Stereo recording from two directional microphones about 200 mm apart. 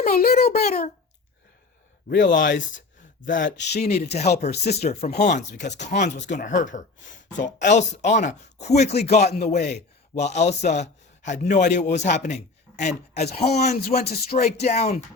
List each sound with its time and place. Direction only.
0.2 s a child's voice: 50° left (ahead or behind)
2.0 s a child's voice: 40° left (ahead or behind)
3.5 s speech: 60° left (ahead or behind)
3.9 s a man's voice: 35° left (ahead or behind)
14.0 s speech: 45° left (ahead or behind)